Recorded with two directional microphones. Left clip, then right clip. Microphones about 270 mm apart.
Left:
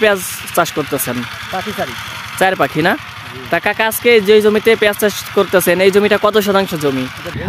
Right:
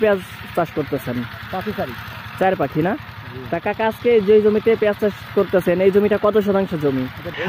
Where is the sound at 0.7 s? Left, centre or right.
Left.